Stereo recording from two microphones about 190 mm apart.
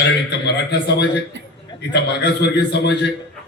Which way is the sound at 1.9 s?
60° left (ahead or behind).